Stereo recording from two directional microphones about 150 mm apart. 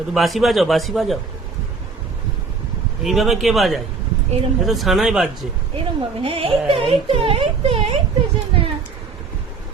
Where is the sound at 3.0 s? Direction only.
Centre (ahead or behind).